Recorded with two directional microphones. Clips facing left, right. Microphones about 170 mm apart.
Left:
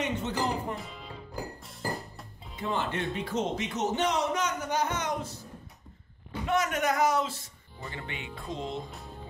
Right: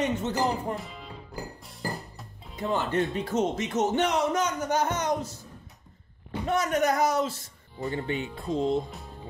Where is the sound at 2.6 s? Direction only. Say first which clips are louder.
Right 5 dB; 40° right (ahead or behind).